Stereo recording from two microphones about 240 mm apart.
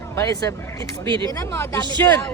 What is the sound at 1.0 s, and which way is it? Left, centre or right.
Speech, centre.